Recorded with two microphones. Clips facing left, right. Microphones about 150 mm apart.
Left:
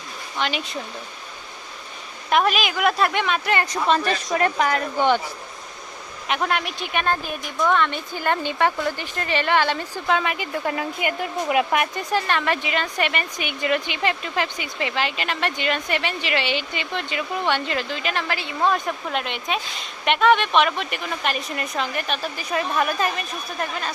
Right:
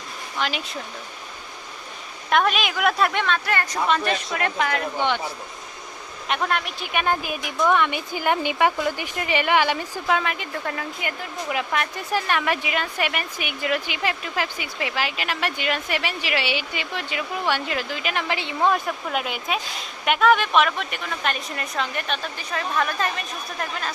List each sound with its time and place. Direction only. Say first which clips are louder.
0.3 s a woman's voice: left 2 dB; centre (ahead or behind)
2.3 s a woman's voice: left 1 dB; centre (ahead or behind)
3.3 s speech: left 2 dB; 20° left (ahead or behind)
3.8 s speech: left 2 dB; 35° left (ahead or behind)
6.2 s a woman's voice: left 1 dB; centre (ahead or behind)
6.9 s speech: right 1 dB; 10° right (ahead or behind)
11.5 s speech: left 5 dB; 15° left (ahead or behind)
12.1 s speech: even; 10° right (ahead or behind)
18.7 s a woman's voice: even; 5° right (ahead or behind)